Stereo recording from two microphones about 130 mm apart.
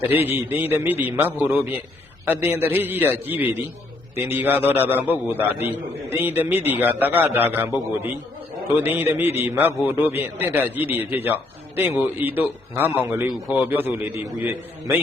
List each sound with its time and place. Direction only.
0.3 s a man's voice: 15° right (ahead or behind)